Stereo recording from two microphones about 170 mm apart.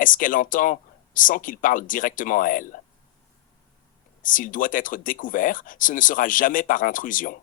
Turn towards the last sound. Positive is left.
turn(degrees=55)  # may be behind; listen again after turning